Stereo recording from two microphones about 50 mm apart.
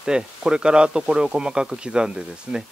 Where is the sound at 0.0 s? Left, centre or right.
Centre.